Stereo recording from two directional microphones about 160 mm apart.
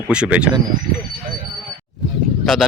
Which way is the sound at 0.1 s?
5° right (ahead or behind).